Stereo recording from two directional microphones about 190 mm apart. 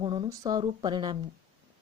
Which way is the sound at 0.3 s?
20° right (ahead or behind).